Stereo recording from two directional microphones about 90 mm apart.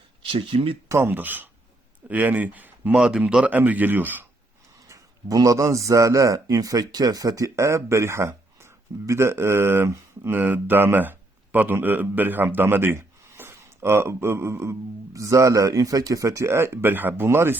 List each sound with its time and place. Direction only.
0.2 s speech: 80° right
0.9 s speech: 25° right (ahead or behind)
4.9 s a man's voice: 40° right (ahead or behind)